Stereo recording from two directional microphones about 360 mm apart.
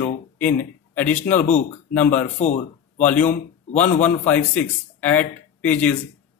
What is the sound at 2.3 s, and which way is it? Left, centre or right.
Speech, centre.